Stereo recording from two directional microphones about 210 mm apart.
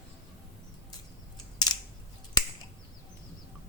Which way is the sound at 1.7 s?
20° left (ahead or behind).